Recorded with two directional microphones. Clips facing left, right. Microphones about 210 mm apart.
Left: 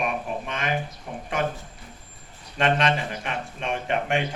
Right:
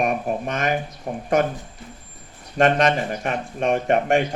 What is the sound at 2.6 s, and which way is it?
Speech, 45° right (ahead or behind).